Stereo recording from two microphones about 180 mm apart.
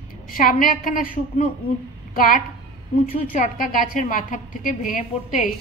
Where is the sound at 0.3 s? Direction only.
50° left (ahead or behind).